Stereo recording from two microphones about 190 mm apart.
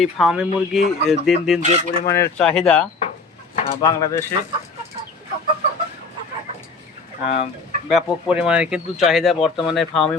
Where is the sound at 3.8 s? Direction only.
20° left (ahead or behind).